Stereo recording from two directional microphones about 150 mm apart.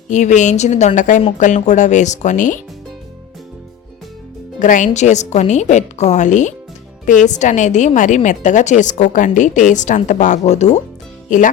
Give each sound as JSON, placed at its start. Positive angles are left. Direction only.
{"t": 0.1, "sound": "a woman's voice", "side_deg": 55}
{"t": 4.6, "sound": "a woman's voice", "side_deg": 60}